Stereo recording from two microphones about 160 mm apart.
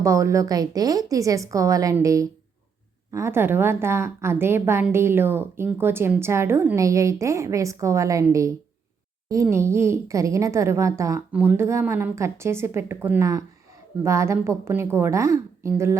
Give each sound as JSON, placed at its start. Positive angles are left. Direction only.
{"t": 0.0, "sound": "a woman's voice", "side_deg": -20}